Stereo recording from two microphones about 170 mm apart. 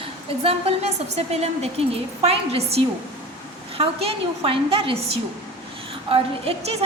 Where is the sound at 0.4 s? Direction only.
40° right (ahead or behind).